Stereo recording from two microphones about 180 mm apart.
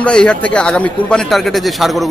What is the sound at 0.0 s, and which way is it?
A man's voice, 5° left (ahead or behind).